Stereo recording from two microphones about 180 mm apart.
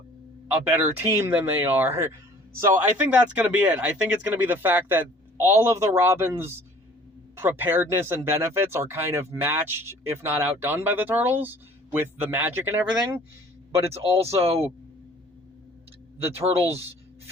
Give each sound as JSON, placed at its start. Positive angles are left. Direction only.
{"t": 0.5, "sound": "speech", "side_deg": -10}
{"t": 13.9, "sound": "speech", "side_deg": -35}
{"t": 16.4, "sound": "speech", "side_deg": -35}